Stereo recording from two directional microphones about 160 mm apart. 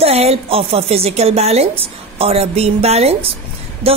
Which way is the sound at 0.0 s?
40° right (ahead or behind).